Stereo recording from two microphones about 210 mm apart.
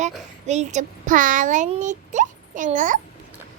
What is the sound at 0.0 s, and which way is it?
A child's voice, 35° right (ahead or behind).